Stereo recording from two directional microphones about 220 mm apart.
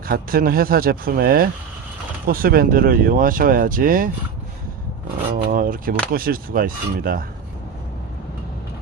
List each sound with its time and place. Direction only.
0.1 s speech: 40° right (ahead or behind)
5.3 s speech: 40° right (ahead or behind)